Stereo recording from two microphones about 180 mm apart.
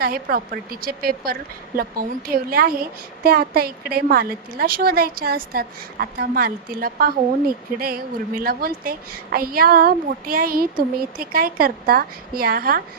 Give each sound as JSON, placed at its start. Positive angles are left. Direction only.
{"t": 0.0, "sound": "a woman's voice", "side_deg": -55}